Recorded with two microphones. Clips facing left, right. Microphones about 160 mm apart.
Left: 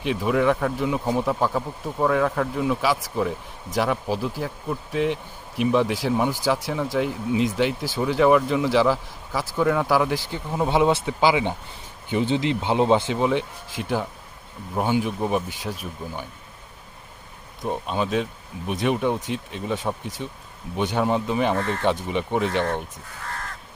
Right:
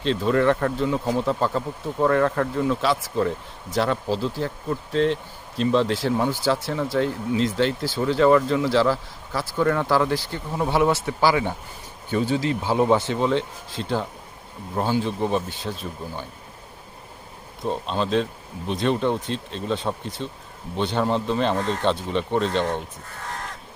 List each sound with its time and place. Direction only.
0.0 s speech: 10° left (ahead or behind)
17.7 s speech: 10° left (ahead or behind)
21.5 s speech: 15° right (ahead or behind)
21.8 s speech: 15° left (ahead or behind)